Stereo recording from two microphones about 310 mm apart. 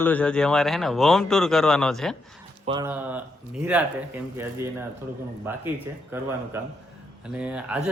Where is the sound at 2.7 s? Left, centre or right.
Centre.